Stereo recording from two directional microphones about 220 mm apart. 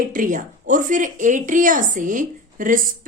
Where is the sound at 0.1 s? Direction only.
35° right (ahead or behind).